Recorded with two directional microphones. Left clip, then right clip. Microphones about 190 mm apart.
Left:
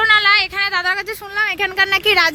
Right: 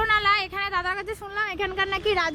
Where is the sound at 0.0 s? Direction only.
10° right (ahead or behind).